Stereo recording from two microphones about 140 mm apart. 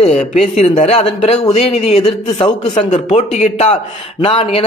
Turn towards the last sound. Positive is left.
turn(degrees=45)  # may be behind; listen again after turning